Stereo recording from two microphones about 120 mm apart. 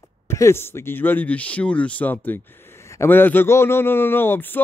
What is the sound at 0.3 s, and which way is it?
Speech, 20° left (ahead or behind).